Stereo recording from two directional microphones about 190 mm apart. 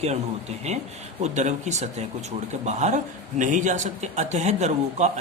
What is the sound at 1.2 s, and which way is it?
A man's voice, 40° right (ahead or behind).